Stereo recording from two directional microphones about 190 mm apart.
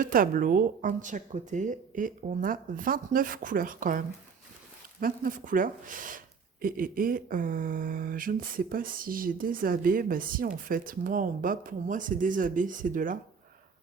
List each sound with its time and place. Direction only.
0.0 s speech: 45° right (ahead or behind)